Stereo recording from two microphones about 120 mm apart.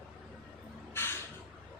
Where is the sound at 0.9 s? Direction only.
20° left (ahead or behind).